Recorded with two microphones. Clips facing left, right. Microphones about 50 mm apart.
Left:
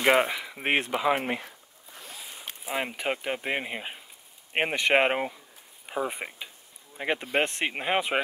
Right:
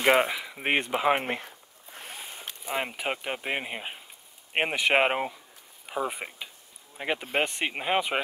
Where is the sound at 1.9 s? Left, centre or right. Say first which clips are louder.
Right 3 dB; right.